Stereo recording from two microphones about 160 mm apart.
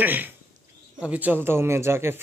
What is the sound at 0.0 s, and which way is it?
A man's voice, 10° right (ahead or behind).